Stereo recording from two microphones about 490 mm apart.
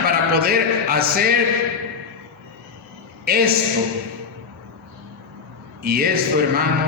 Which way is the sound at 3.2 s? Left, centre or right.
Centre.